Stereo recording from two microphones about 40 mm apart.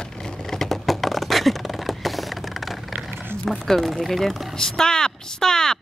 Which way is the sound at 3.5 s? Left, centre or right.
Centre.